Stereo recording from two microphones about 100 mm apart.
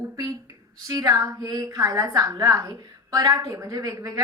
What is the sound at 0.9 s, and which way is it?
A woman's voice, 35° right (ahead or behind).